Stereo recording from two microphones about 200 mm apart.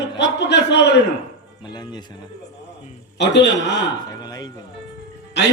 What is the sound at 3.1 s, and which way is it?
Speech, 60° left (ahead or behind).